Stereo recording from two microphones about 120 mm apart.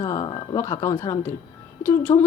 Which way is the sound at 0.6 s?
25° left (ahead or behind).